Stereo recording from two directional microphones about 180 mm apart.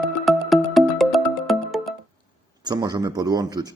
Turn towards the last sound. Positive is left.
turn(degrees=-20)  # may be behind; listen again after turning